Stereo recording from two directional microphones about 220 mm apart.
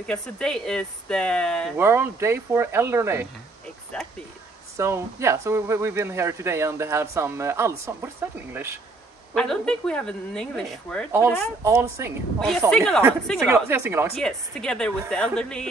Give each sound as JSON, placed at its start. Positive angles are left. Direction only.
{"t": 0.0, "sound": "speech", "side_deg": 5}
{"t": 1.8, "sound": "speech", "side_deg": -10}
{"t": 3.9, "sound": "a sound", "side_deg": 5}
{"t": 4.7, "sound": "speech", "side_deg": -15}
{"t": 9.3, "sound": "speech", "side_deg": 5}
{"t": 11.1, "sound": "speech", "side_deg": -10}
{"t": 12.4, "sound": "speech", "side_deg": 0}
{"t": 13.5, "sound": "speech", "side_deg": -10}
{"t": 14.1, "sound": "speech", "side_deg": 5}